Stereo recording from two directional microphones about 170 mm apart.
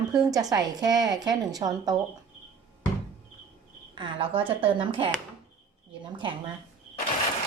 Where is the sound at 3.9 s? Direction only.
30° right (ahead or behind).